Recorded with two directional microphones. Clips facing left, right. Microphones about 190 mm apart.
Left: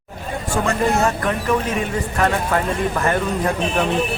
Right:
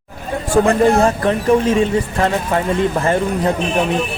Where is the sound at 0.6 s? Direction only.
30° right (ahead or behind).